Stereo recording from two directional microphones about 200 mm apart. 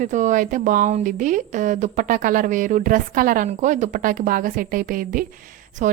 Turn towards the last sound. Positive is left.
turn(degrees=-40)  # may be behind; listen again after turning